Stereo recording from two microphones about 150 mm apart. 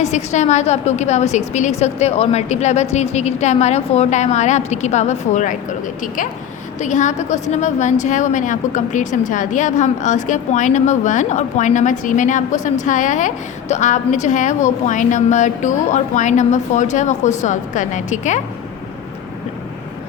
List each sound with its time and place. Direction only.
0.0 s a woman's voice: 50° left (ahead or behind)
6.7 s a woman's voice: 55° left (ahead or behind)